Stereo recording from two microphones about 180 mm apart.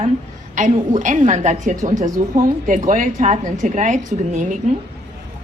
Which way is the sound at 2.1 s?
15° right (ahead or behind).